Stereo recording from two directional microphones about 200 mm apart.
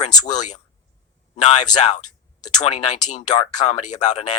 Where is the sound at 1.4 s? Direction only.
35° left (ahead or behind).